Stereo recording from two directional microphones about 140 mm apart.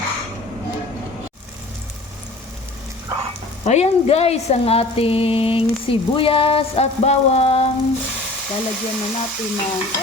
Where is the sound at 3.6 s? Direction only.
50° left (ahead or behind).